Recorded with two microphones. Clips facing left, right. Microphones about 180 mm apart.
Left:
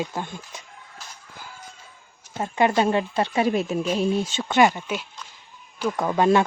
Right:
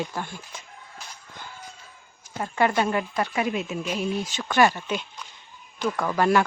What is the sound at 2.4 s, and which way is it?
A woman's voice, 25° left (ahead or behind).